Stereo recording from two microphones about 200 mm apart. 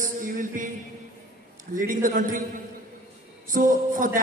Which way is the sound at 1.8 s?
40° right (ahead or behind).